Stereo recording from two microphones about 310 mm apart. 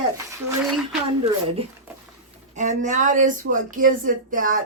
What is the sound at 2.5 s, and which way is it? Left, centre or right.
Speech, right.